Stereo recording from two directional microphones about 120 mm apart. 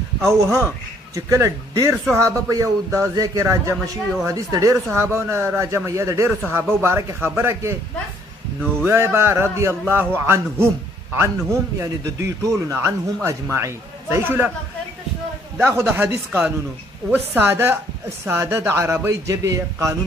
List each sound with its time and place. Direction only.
0.3 s a man's voice: 25° right (ahead or behind)
8.8 s a man's voice: 20° right (ahead or behind)
15.8 s a man's voice: 15° right (ahead or behind)